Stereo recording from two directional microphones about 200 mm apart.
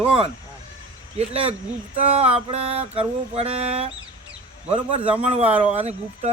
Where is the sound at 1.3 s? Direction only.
30° right (ahead or behind).